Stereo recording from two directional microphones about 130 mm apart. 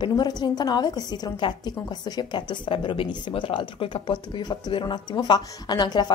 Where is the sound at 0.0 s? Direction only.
30° left (ahead or behind).